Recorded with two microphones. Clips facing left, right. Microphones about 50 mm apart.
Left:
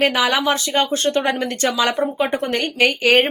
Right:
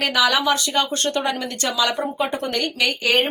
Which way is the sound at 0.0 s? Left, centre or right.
Left.